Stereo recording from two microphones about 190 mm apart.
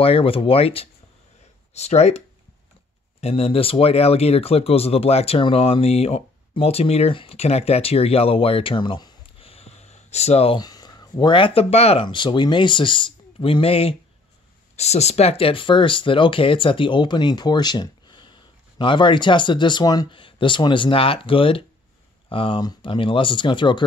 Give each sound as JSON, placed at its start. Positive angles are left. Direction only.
{"t": 0.0, "sound": "speech", "side_deg": 30}